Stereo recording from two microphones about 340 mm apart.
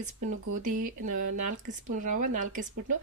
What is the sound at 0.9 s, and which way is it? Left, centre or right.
Speech, right.